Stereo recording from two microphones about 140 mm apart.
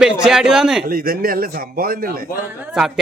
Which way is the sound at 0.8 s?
90° right.